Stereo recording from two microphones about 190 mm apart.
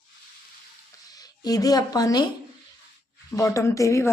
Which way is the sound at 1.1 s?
20° left (ahead or behind).